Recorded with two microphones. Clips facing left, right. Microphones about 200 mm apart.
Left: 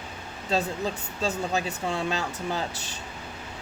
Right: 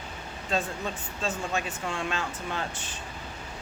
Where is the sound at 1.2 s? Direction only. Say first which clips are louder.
Left 3 dB; 35° left (ahead or behind).